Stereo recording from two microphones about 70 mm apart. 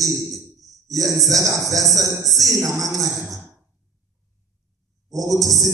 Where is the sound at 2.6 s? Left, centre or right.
Right.